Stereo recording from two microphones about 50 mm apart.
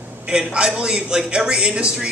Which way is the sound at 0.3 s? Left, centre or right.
Centre.